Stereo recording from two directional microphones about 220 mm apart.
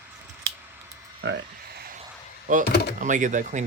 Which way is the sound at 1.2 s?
50° right (ahead or behind).